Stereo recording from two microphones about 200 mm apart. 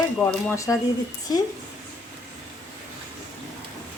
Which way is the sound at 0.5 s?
15° left (ahead or behind).